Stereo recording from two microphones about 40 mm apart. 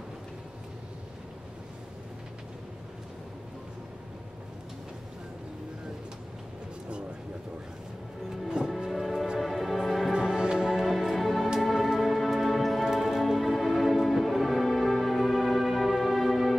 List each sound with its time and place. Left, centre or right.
8.5 s music: centre
8.9 s music: centre
10.1 s music: centre
10.8 s music: centre